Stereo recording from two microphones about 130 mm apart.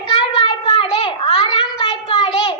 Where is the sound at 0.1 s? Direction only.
40° left (ahead or behind).